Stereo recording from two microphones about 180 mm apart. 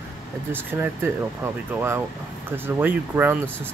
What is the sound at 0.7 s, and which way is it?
Speech, 15° right (ahead or behind).